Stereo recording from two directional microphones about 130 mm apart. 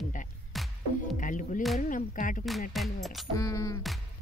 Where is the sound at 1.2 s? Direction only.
80° left.